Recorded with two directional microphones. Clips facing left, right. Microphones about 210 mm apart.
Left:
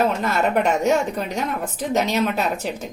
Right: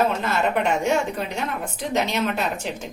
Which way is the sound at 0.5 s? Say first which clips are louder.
Left 4 dB; 40° left (ahead or behind).